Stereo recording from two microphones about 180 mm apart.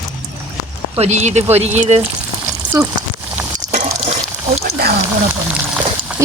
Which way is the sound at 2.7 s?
15° right (ahead or behind).